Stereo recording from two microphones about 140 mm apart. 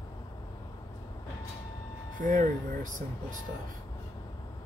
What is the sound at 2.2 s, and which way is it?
Speech, 75° right (ahead or behind).